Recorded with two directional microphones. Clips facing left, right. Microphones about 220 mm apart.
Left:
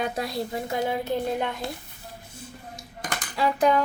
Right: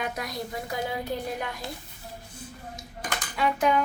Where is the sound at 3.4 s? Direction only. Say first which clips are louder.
Left 3 dB; 35° left (ahead or behind).